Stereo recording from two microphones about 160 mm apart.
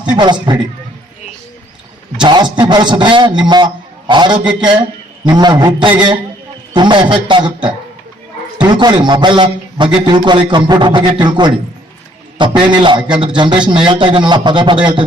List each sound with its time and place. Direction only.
0.1 s a man's voice: 30° right (ahead or behind)
2.2 s a man's voice: 30° right (ahead or behind)